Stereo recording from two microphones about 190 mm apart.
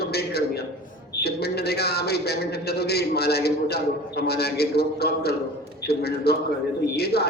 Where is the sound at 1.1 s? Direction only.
60° left (ahead or behind).